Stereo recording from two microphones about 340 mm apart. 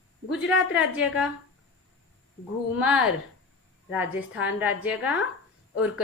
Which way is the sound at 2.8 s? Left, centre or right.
Centre.